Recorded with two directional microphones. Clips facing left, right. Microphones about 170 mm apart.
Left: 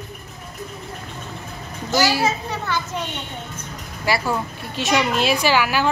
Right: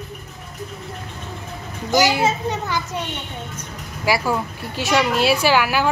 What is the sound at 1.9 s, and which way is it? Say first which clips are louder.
Speech: right 2 dB; 20° right (ahead or behind).